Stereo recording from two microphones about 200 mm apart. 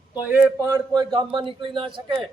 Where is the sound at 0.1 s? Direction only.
10° right (ahead or behind).